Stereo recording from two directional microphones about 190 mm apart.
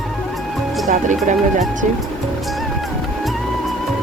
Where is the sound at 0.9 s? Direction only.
40° right (ahead or behind).